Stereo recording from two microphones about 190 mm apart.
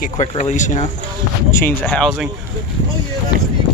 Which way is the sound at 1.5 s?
10° left (ahead or behind).